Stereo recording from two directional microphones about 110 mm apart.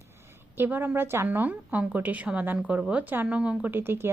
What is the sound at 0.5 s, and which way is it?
A woman's voice, 15° right (ahead or behind).